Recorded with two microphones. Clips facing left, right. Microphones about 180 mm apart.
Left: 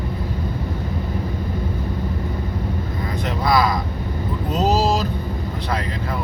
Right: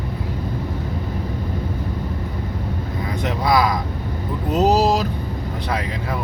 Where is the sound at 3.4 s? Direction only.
15° right (ahead or behind).